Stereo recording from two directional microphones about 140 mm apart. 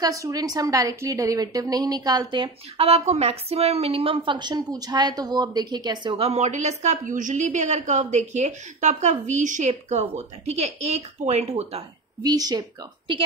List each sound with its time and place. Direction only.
0.0 s a woman's voice: 25° right (ahead or behind)
6.1 s a woman's voice: 50° right (ahead or behind)
12.2 s a woman's voice: 25° right (ahead or behind)